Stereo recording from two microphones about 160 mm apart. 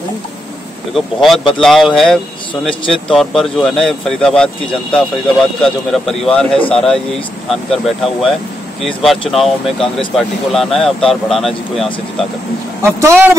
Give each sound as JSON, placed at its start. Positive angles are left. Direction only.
{"t": 0.9, "sound": "speech", "side_deg": 0}
{"t": 12.8, "sound": "speech", "side_deg": -15}